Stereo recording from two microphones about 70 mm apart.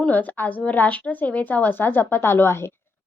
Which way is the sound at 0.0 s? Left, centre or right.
Left.